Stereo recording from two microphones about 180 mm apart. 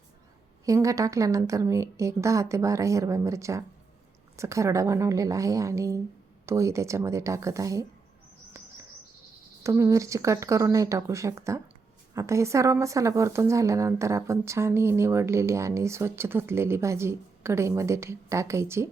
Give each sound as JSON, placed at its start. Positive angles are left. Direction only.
{"t": 0.6, "sound": "a woman's voice", "side_deg": -20}
{"t": 9.6, "sound": "a woman's voice", "side_deg": -15}